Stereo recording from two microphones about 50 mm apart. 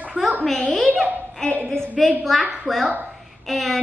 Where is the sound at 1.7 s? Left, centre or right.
Centre.